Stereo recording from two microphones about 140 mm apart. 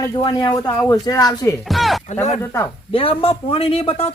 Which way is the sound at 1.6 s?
Centre (ahead or behind).